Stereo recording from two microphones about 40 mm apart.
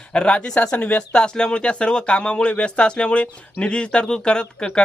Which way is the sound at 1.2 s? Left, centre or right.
Left.